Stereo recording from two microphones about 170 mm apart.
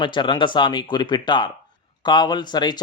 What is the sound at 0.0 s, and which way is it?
Speech, 30° left (ahead or behind).